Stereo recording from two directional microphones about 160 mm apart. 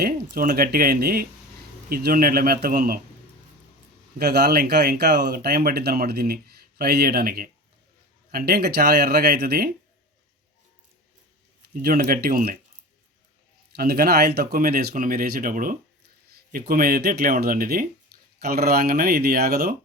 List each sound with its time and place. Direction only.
0.0 s speech: 70° right (ahead or behind)
4.2 s speech: 90° right
11.6 s speech: 65° right (ahead or behind)
13.7 s speech: 70° right (ahead or behind)
18.3 s speech: 75° right (ahead or behind)